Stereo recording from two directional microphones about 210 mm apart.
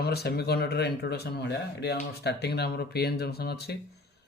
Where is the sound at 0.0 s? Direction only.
50° left (ahead or behind).